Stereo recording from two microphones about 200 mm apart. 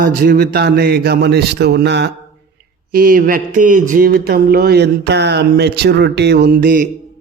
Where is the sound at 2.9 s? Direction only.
45° right (ahead or behind).